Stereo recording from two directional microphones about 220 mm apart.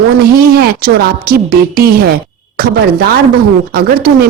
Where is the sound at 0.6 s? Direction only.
45° right (ahead or behind).